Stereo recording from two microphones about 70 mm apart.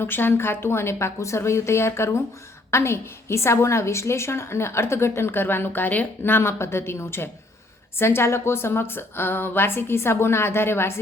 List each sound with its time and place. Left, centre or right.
0.0 s a woman's voice: left